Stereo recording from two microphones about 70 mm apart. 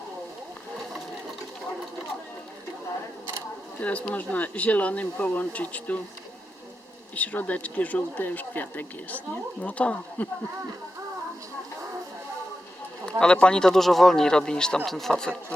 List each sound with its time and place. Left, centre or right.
3.8 s speech: centre
7.2 s speech: left
13.1 s speech: centre